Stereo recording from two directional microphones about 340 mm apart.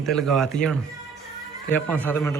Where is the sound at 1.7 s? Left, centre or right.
Centre.